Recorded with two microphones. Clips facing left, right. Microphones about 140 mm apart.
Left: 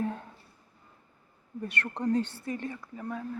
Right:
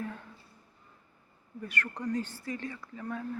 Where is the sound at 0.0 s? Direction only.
30° left (ahead or behind).